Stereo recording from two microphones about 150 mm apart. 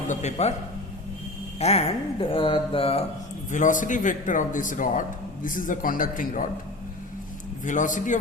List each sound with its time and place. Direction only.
0.1 s speech: 50° left (ahead or behind)
1.5 s speech: 45° left (ahead or behind)
3.5 s a man's voice: 60° left (ahead or behind)
7.6 s a man's voice: 55° left (ahead or behind)